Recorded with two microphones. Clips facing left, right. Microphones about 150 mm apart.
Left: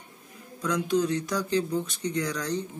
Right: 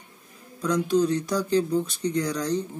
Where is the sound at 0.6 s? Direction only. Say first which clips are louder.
Right 3 dB; 35° right (ahead or behind).